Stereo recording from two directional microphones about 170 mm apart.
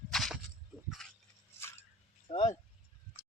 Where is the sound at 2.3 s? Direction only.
30° left (ahead or behind).